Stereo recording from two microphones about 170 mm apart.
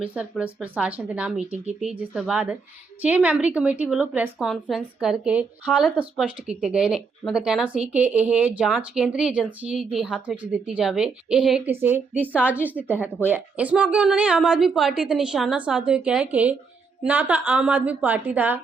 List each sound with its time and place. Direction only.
0.0 s a woman's voice: 5° right (ahead or behind)
12.8 s a woman's voice: centre (ahead or behind)
13.2 s a woman's voice: 10° right (ahead or behind)